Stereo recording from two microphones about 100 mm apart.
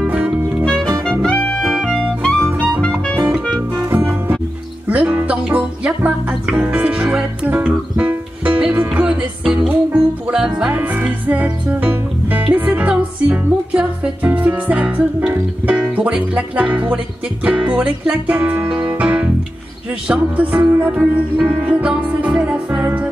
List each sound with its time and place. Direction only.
0.0 s music: 10° right (ahead or behind)
1.2 s music: 10° left (ahead or behind)
3.8 s music: 20° right (ahead or behind)
20.6 s speech: 20° right (ahead or behind)
20.9 s music: 15° right (ahead or behind)